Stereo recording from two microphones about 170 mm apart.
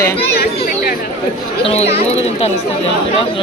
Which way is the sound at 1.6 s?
40° left (ahead or behind).